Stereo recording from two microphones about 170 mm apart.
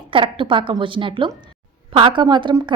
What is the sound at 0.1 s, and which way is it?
A woman's voice, 30° right (ahead or behind).